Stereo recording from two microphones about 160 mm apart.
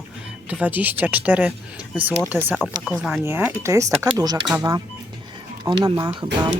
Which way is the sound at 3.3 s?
15° right (ahead or behind).